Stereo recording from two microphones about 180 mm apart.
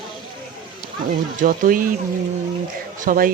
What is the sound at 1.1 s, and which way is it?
Speech, 50° right (ahead or behind).